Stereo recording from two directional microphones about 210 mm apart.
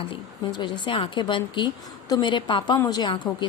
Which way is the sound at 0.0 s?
25° left (ahead or behind).